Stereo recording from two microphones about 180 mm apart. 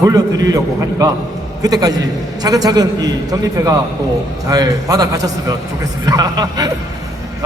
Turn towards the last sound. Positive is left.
turn(degrees=-20)  # may be behind; listen again after turning